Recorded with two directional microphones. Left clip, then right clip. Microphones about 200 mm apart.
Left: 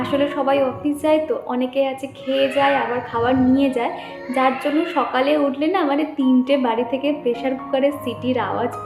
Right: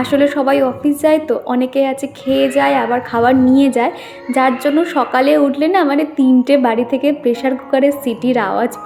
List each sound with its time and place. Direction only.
0.0 s a woman's voice: 45° right (ahead or behind)